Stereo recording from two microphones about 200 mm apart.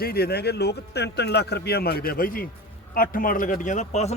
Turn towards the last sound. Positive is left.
turn(degrees=35)  # may be behind; listen again after turning